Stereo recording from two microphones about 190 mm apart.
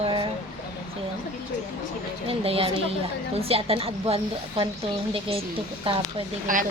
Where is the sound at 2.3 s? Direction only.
30° right (ahead or behind).